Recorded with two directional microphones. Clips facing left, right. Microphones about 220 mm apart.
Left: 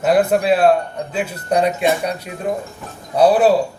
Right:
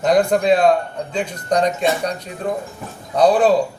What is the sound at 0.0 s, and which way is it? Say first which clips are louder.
Speech: even; 5° left (ahead or behind).